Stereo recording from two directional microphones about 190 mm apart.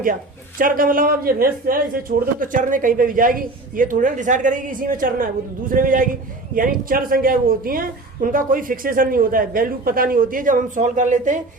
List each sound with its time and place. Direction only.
0.6 s a man's voice: 45° right (ahead or behind)